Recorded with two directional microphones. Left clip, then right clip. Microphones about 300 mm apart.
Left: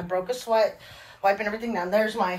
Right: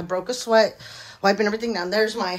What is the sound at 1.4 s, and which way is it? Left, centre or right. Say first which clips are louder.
Speech: right 5 dB; centre.